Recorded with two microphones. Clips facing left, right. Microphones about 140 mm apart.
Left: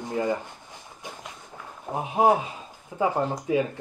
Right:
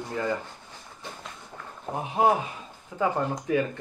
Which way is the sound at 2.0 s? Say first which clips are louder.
Left 2 dB; 20° left (ahead or behind).